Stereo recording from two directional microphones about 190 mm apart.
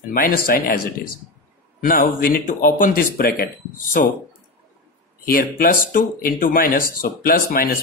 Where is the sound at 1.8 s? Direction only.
45° left (ahead or behind).